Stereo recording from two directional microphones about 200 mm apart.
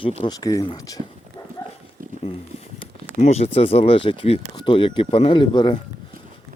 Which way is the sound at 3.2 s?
30° left (ahead or behind).